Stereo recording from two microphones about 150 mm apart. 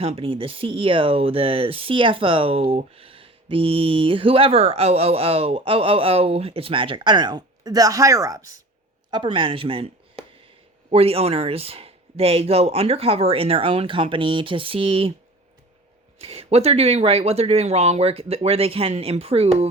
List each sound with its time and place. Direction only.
0.0 s speech: 40° right (ahead or behind)
16.2 s speech: 40° right (ahead or behind)